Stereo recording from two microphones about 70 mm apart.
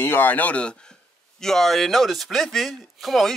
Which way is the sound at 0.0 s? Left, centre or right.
Left.